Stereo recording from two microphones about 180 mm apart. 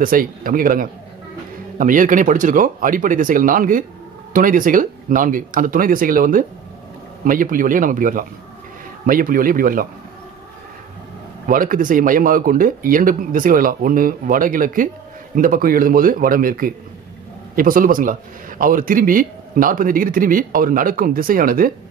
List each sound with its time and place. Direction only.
0.0 s speech: 50° right (ahead or behind)
11.4 s speech: 50° right (ahead or behind)